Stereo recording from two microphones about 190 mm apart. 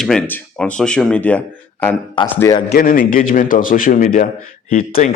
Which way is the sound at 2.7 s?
50° left (ahead or behind).